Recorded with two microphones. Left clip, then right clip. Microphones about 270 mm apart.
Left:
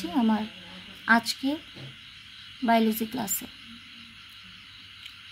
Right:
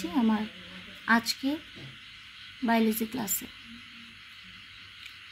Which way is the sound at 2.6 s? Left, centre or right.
Centre.